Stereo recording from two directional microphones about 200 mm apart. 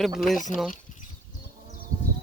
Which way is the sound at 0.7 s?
40° left (ahead or behind).